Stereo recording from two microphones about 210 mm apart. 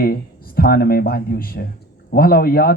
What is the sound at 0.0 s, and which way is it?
Speech, 45° left (ahead or behind).